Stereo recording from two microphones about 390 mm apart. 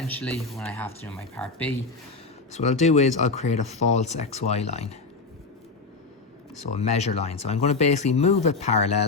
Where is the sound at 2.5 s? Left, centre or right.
Centre.